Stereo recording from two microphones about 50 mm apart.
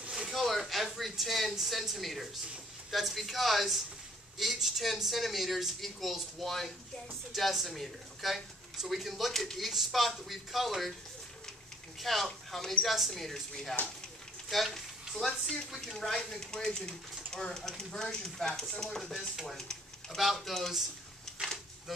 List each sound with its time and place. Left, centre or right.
0.3 s speech: centre
12.0 s speech: centre
21.4 s a sound: centre